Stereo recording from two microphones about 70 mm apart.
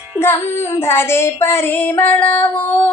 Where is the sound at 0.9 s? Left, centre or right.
Left.